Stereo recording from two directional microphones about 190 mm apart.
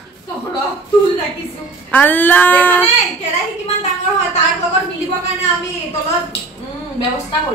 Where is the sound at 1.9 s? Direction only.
10° left (ahead or behind).